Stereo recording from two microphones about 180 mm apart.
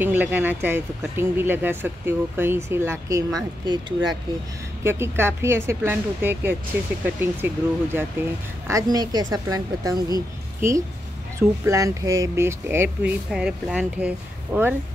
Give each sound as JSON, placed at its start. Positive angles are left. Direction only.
{"t": 0.0, "sound": "speech", "side_deg": -10}
{"t": 4.8, "sound": "a woman's voice", "side_deg": -15}